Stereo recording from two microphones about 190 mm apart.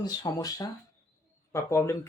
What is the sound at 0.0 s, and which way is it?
Speech, 20° left (ahead or behind).